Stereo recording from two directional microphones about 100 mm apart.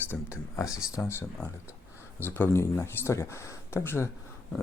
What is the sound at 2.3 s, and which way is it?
Speech, 25° left (ahead or behind).